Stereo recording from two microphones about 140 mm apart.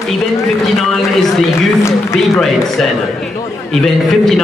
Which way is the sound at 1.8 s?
20° left (ahead or behind).